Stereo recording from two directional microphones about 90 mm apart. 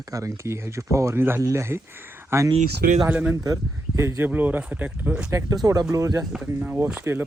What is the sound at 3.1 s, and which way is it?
Speech, 15° right (ahead or behind).